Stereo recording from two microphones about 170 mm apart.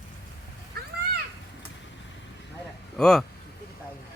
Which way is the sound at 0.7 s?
65° right (ahead or behind).